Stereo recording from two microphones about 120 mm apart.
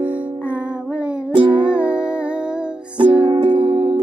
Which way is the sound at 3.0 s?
45° right (ahead or behind).